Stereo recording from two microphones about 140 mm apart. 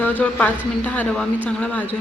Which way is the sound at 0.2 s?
10° left (ahead or behind).